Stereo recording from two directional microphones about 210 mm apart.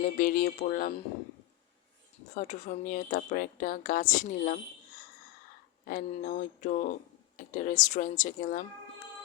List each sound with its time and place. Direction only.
0.0 s speech: 40° left (ahead or behind)
2.3 s speech: 35° left (ahead or behind)
5.8 s speech: 40° left (ahead or behind)